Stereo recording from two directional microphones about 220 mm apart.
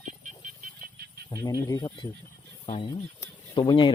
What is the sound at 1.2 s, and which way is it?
Speech, 15° left (ahead or behind).